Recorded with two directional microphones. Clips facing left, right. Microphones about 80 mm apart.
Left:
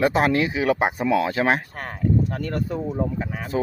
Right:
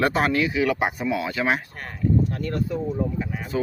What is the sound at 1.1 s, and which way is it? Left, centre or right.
Speech, left.